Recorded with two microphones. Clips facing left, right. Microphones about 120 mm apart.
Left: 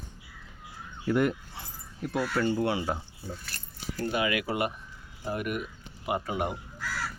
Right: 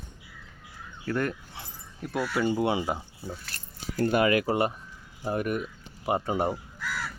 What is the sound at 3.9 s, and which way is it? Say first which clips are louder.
Speech: right 6 dB; 55° right (ahead or behind).